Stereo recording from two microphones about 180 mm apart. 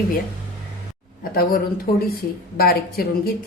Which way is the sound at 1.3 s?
55° left (ahead or behind).